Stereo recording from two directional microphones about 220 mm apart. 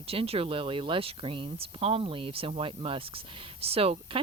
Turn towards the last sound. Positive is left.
turn(degrees=-25)  # may be behind; listen again after turning